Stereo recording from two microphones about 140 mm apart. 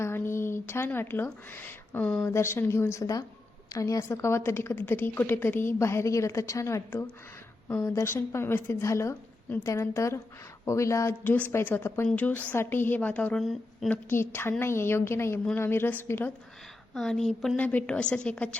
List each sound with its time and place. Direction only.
0.0 s a woman's voice: 15° left (ahead or behind)
13.4 s speech: centre (ahead or behind)
13.9 s a woman's voice: 15° left (ahead or behind)
16.9 s a woman's voice: centre (ahead or behind)